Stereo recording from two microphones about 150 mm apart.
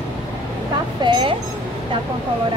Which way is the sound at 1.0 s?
30° right (ahead or behind).